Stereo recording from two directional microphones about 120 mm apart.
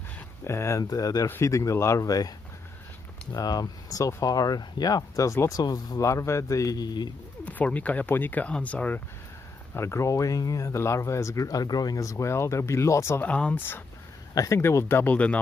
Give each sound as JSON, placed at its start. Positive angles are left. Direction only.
{"t": 0.4, "sound": "speech", "side_deg": 20}
{"t": 3.3, "sound": "speech", "side_deg": 30}
{"t": 7.4, "sound": "speech", "side_deg": 10}
{"t": 9.7, "sound": "speech", "side_deg": 20}